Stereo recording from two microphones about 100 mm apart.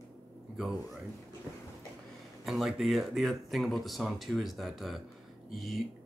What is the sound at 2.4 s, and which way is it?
Speech, 5° right (ahead or behind).